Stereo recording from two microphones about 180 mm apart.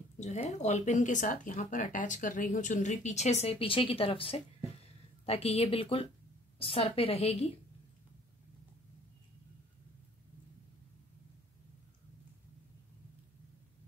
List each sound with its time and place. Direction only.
0.2 s speech: 40° left (ahead or behind)